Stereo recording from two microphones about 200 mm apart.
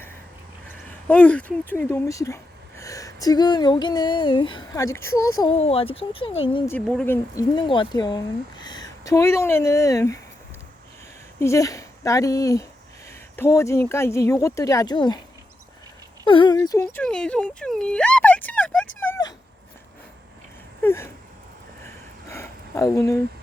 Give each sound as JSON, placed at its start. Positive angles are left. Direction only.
{"t": 0.9, "sound": "speech", "side_deg": 10}
{"t": 5.5, "sound": "speech", "side_deg": 30}
{"t": 6.7, "sound": "speech", "side_deg": 5}
{"t": 7.5, "sound": "speech", "side_deg": 25}
{"t": 11.3, "sound": "speech", "side_deg": 15}
{"t": 16.2, "sound": "speech", "side_deg": 25}
{"t": 18.9, "sound": "a sound", "side_deg": 15}
{"t": 20.8, "sound": "speech", "side_deg": 10}
{"t": 21.8, "sound": "a sound", "side_deg": 15}